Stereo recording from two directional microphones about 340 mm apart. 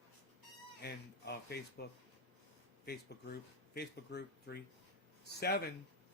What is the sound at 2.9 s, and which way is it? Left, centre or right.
Speech, left.